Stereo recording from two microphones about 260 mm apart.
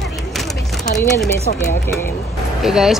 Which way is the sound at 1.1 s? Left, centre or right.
Centre.